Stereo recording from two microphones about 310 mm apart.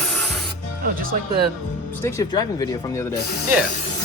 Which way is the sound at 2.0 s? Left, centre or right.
Centre.